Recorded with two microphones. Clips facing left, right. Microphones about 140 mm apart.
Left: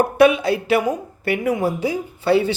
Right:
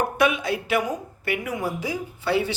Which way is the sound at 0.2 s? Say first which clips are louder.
Left 10 dB; 30° left (ahead or behind).